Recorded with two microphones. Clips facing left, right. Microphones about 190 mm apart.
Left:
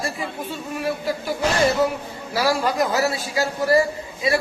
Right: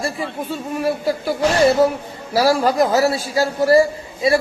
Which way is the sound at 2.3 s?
35° right (ahead or behind).